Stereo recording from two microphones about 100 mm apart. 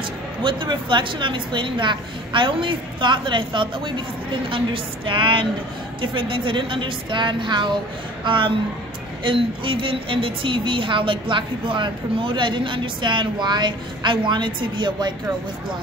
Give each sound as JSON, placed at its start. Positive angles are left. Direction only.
{"t": 0.4, "sound": "a woman's voice", "side_deg": -55}